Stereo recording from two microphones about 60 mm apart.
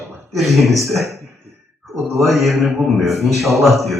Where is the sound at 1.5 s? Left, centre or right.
Right.